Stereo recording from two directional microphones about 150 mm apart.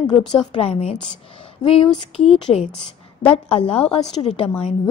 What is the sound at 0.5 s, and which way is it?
Speech, 40° left (ahead or behind).